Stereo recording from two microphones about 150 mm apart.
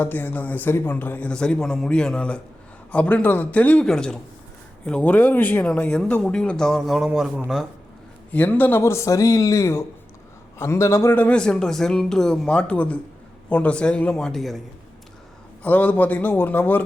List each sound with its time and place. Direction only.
0.0 s speech: 15° left (ahead or behind); by 7.7 s 5° right (ahead or behind)
8.3 s speech: 10° left (ahead or behind)
15.6 s speech: 10° left (ahead or behind)